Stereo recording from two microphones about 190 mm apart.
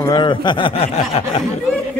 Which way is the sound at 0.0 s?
20° left (ahead or behind).